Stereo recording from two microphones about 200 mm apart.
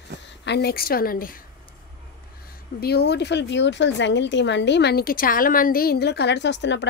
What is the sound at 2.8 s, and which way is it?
Speech, 55° left (ahead or behind).